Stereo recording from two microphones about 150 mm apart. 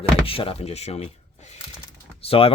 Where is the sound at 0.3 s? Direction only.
40° left (ahead or behind).